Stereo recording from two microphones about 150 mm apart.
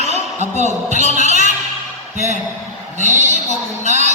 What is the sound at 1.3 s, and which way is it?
Music, 50° right (ahead or behind).